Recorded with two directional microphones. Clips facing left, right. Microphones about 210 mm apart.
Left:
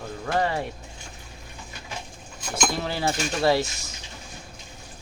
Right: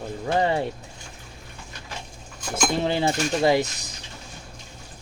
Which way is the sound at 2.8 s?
20° right (ahead or behind).